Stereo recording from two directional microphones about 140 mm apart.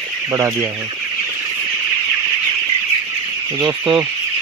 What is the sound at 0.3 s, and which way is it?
Speech, 20° right (ahead or behind).